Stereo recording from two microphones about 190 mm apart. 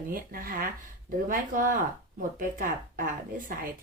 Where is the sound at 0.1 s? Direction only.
50° right (ahead or behind).